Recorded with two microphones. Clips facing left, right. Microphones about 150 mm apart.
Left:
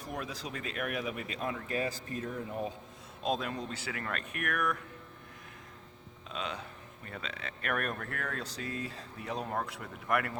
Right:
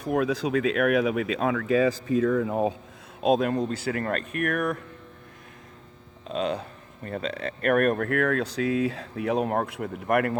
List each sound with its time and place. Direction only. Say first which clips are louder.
0.0 s speech: right 15 dB; 70° right (ahead or behind); by 2.7 s 90° right
3.2 s speech: right 11 dB; 60° right (ahead or behind); by 4.8 s 35° right (ahead or behind)
6.2 s speech: right 11 dB; 40° right (ahead or behind); by 10.3 s 55° right (ahead or behind)